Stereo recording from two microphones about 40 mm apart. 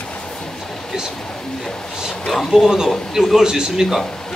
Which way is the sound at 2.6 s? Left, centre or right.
Centre.